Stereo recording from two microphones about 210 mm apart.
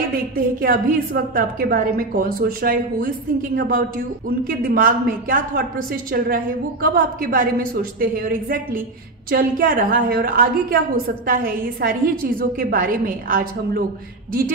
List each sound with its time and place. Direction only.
0.6 s a woman's voice: 45° right (ahead or behind)